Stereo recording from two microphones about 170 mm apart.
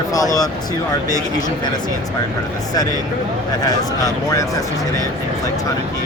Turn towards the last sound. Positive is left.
turn(degrees=20)  # may be behind; listen again after turning